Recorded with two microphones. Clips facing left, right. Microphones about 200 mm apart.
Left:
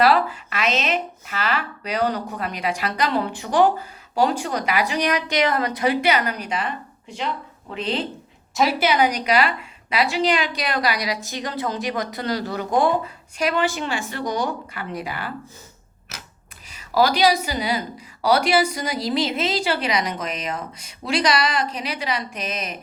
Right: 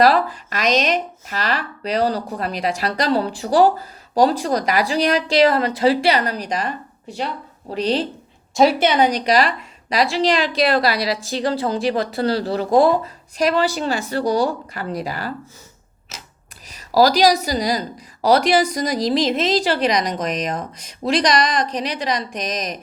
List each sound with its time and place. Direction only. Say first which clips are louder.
0.0 s speech: right 2 dB; 40° right (ahead or behind)
16.6 s a woman's voice: right 4 dB; 40° right (ahead or behind)